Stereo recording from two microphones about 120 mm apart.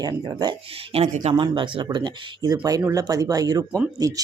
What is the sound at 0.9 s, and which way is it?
Speech, 55° right (ahead or behind).